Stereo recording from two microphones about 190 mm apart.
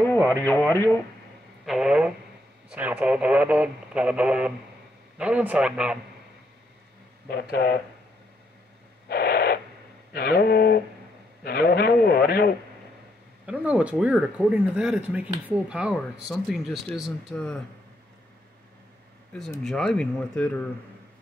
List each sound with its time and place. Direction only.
0.3 s speech: 10° left (ahead or behind)
1.7 s speech: 5° right (ahead or behind)
7.2 s a sound: 60° left (ahead or behind)
9.1 s owl: 55° left (ahead or behind)
10.1 s a sound: 55° left (ahead or behind)
11.4 s a man's voice: 55° left (ahead or behind)
13.5 s speech: 5° right (ahead or behind)
19.6 s speech: 5° left (ahead or behind)